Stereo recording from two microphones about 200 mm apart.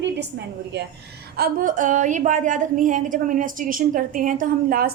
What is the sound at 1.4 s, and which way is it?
A woman's voice, 45° right (ahead or behind).